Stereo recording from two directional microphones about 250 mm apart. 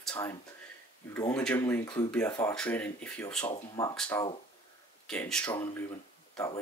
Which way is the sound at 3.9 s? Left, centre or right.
Centre.